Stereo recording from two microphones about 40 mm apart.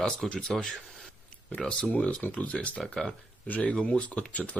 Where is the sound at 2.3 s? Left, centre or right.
Left.